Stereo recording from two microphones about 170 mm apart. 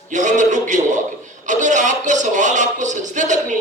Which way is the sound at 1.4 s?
45° right (ahead or behind).